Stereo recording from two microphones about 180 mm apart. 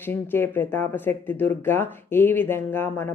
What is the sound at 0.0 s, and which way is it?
Speech, 10° left (ahead or behind).